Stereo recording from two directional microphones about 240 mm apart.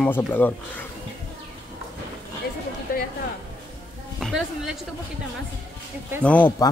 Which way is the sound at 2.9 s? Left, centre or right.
Left.